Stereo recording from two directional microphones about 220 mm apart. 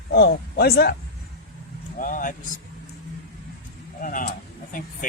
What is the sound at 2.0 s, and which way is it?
Speech, 35° left (ahead or behind).